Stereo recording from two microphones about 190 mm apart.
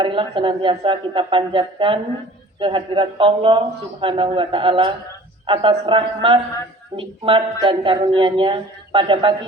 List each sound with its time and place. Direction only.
0.0 s a woman's voice: 25° right (ahead or behind)